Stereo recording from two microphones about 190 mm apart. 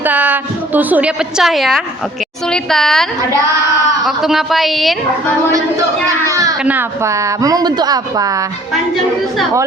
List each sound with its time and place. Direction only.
0.0 s a woman's voice: 10° right (ahead or behind)
6.2 s speech: 15° right (ahead or behind)